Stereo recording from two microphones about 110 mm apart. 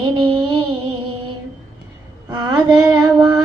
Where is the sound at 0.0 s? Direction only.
45° right (ahead or behind).